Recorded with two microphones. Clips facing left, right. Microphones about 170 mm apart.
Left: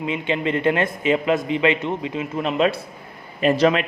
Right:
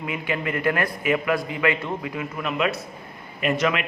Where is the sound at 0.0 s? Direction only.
25° left (ahead or behind).